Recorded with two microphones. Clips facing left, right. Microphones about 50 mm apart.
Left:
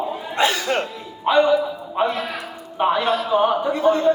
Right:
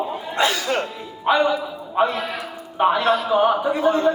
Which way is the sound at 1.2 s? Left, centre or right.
Centre.